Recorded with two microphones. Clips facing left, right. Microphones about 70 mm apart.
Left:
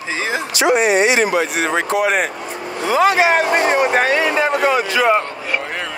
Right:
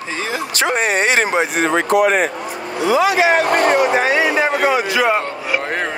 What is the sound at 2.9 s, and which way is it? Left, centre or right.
Speech, left.